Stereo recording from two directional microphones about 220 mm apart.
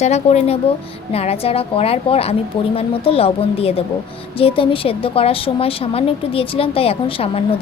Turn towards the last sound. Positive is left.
turn(degrees=25)  # may be behind; listen again after turning